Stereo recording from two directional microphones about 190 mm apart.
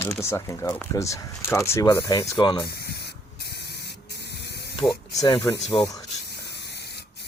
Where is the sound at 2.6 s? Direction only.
55° left (ahead or behind).